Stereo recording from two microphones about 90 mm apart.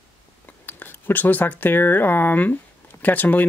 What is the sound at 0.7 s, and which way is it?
Speech, 20° left (ahead or behind).